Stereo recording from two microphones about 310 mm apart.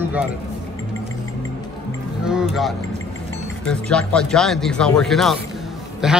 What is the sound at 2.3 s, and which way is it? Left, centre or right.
Music, centre.